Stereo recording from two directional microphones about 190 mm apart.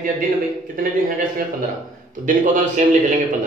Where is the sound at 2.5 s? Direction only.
45° right (ahead or behind).